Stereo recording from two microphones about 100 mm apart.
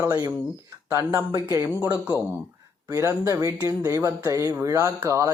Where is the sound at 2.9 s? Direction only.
30° right (ahead or behind).